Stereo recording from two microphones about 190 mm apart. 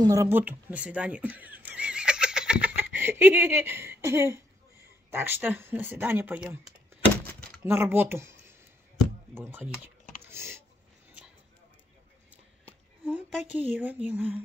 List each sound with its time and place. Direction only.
0.0 s speech: 15° right (ahead or behind)
7.6 s speech: 10° right (ahead or behind)
10.2 s a sound: 10° right (ahead or behind)
13.0 s speech: 5° right (ahead or behind)